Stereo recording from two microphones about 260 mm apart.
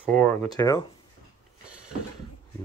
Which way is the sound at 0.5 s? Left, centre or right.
Centre.